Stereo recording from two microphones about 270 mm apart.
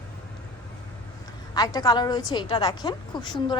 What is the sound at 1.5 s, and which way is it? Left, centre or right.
A woman's voice, centre.